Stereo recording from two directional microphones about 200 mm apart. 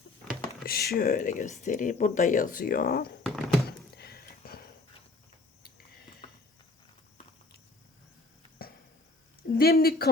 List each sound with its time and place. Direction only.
0.6 s a sound: 50° left (ahead or behind)
0.9 s speech: 45° left (ahead or behind)
3.2 s thunk: 5° left (ahead or behind)
3.7 s a sound: 50° left (ahead or behind)
8.6 s chop: 50° left (ahead or behind)
9.6 s speech: 50° left (ahead or behind)